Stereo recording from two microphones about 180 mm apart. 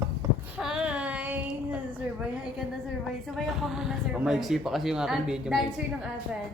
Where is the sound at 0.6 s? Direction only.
5° right (ahead or behind).